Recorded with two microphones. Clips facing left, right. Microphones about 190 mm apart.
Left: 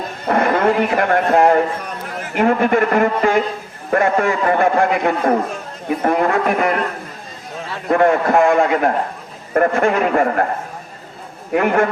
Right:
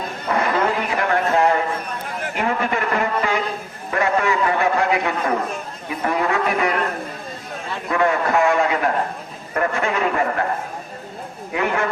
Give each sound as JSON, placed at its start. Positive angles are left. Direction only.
{"t": 0.3, "sound": "a man's voice", "side_deg": 50}
{"t": 7.9, "sound": "a man's voice", "side_deg": 50}
{"t": 11.5, "sound": "a man's voice", "side_deg": 50}